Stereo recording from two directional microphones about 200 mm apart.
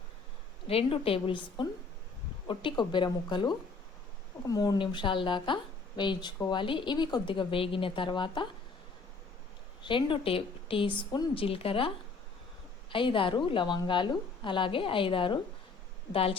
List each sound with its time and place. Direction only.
0.7 s a woman's voice: 30° left (ahead or behind)
9.8 s a woman's voice: 25° left (ahead or behind)